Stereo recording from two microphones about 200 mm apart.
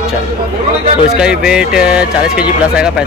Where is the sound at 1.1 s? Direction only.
5° right (ahead or behind).